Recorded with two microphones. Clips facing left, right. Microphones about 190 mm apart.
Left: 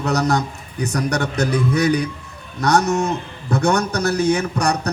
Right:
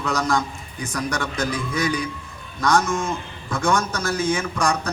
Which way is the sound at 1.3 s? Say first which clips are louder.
Left 6 dB; 65° left (ahead or behind).